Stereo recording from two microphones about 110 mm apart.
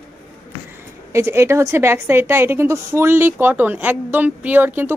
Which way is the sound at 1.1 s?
25° right (ahead or behind).